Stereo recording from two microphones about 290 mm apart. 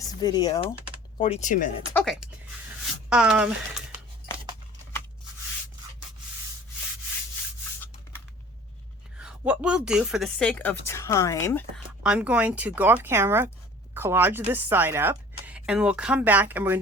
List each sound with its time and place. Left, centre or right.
0.2 s speech: centre
1.9 s a woman's voice: centre
9.2 s a woman's voice: centre
11.9 s a woman's voice: centre